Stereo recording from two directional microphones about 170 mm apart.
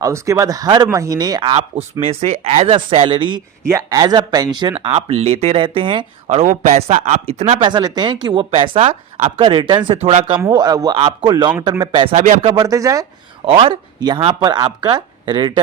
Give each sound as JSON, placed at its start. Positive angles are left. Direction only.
{"t": 0.0, "sound": "speech", "side_deg": -20}
{"t": 3.7, "sound": "speech", "side_deg": -20}
{"t": 6.4, "sound": "speech", "side_deg": -40}
{"t": 7.7, "sound": "speech", "side_deg": -25}
{"t": 10.4, "sound": "speech", "side_deg": -25}
{"t": 13.4, "sound": "speech", "side_deg": -35}